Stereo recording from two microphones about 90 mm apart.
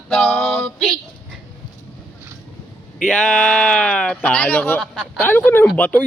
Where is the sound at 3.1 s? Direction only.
10° left (ahead or behind).